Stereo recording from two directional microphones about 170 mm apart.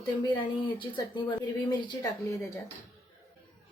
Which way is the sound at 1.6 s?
25° left (ahead or behind).